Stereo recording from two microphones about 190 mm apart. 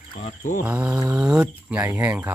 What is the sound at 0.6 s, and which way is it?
Speech, 5° right (ahead or behind).